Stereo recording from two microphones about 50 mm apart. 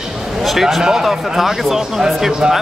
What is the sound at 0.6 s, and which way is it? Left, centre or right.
A man's voice, centre.